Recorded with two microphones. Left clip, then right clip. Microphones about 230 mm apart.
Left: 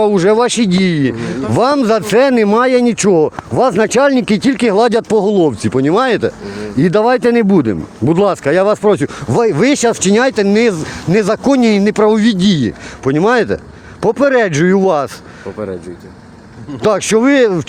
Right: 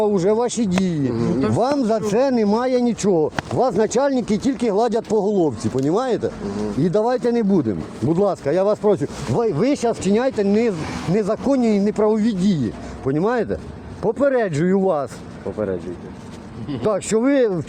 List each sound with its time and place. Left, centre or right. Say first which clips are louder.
0.0 s speech: left 7 dB; left
16.8 s speech: left 8 dB; left